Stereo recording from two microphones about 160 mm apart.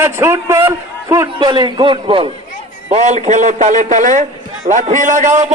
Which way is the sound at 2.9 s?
45° right (ahead or behind).